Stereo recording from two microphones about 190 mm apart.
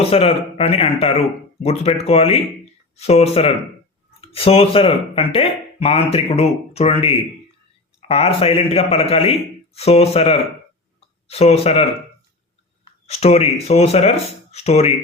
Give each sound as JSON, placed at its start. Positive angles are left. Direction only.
{"t": 0.0, "sound": "speech", "side_deg": 30}